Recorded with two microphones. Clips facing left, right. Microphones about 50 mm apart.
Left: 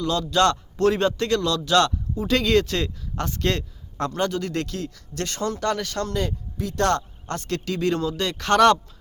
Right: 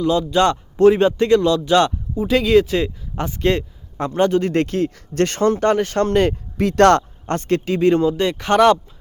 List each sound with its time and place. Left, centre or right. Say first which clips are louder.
0.0 s speech: right 4 dB; centre; by 7.0 s right
7.3 s speech: right 8 dB; right; by 8.8 s centre